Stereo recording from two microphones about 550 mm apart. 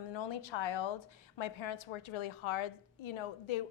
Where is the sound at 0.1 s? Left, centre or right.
Left.